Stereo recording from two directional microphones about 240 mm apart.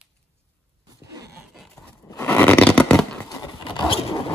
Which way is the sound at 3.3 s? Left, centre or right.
Centre.